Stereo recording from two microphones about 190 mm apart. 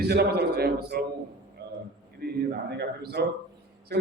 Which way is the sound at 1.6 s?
60° right (ahead or behind).